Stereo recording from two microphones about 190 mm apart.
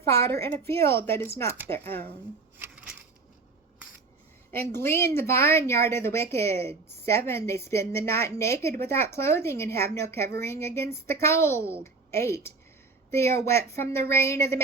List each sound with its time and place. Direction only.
0.1 s a woman's voice: 15° left (ahead or behind)
2.6 s a sound: 5° right (ahead or behind)
4.5 s a woman's voice: 10° left (ahead or behind)